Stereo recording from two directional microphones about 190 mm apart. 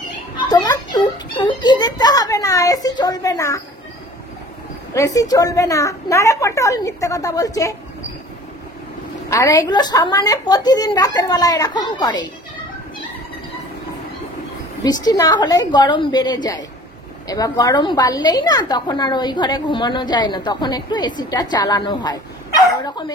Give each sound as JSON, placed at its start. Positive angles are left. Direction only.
{"t": 0.4, "sound": "a child's voice", "side_deg": 20}
{"t": 4.9, "sound": "a woman's voice", "side_deg": 15}
{"t": 9.3, "sound": "a woman's voice", "side_deg": 15}
{"t": 14.8, "sound": "a woman's voice", "side_deg": 20}